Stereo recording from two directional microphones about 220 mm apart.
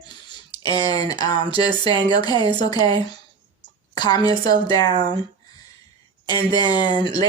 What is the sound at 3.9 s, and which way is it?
A woman's voice, 20° left (ahead or behind).